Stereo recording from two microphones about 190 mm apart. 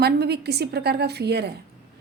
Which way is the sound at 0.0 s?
60° right (ahead or behind).